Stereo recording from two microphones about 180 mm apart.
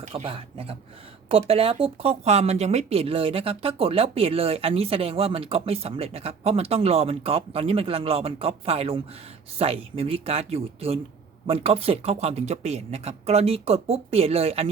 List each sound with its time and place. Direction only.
0.1 s speech: 30° right (ahead or behind)